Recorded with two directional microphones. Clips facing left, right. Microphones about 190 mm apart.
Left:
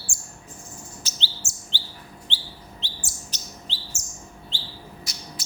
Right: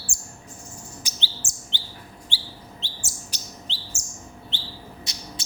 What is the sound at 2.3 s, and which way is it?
Bird, 10° right (ahead or behind).